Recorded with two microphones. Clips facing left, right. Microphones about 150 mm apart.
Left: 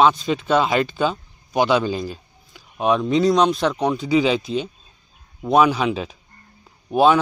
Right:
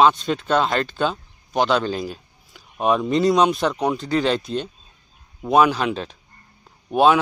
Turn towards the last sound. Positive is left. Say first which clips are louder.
# even
turn(degrees=0)  # may be behind; listen again after turning